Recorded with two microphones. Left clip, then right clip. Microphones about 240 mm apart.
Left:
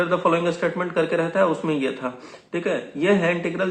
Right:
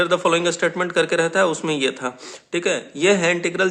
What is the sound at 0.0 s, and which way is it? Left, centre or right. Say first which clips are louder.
Speech: right 2 dB; right.